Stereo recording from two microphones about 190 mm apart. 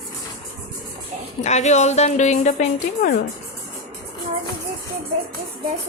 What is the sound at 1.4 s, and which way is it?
A woman's voice, 35° left (ahead or behind).